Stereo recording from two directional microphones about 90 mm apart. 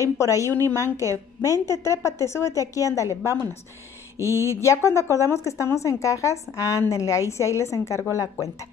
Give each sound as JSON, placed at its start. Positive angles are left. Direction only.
{"t": 0.2, "sound": "speech", "side_deg": 35}
{"t": 1.1, "sound": "a woman's voice", "side_deg": -35}
{"t": 1.7, "sound": "speech", "side_deg": 35}
{"t": 4.2, "sound": "speech", "side_deg": 30}